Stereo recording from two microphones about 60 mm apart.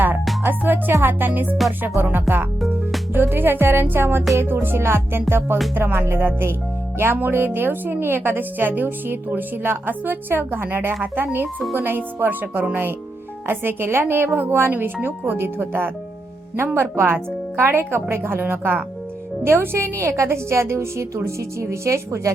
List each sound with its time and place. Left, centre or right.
0.4 s a woman's voice: right